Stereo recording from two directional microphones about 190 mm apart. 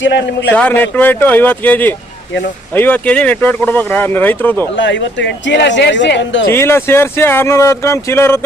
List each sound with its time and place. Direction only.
0.0 s speech: 65° left (ahead or behind)
0.5 s speech: 10° left (ahead or behind)
4.8 s speech: 70° left (ahead or behind)
6.5 s speech: 10° left (ahead or behind)